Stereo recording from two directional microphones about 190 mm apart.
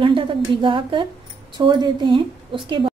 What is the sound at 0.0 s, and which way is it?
A woman's voice, 25° right (ahead or behind).